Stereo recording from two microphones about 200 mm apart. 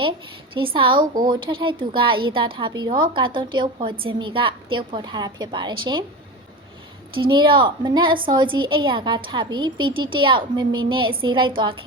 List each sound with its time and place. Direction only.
0.5 s a woman's voice: 25° right (ahead or behind)
7.2 s a woman's voice: 25° right (ahead or behind)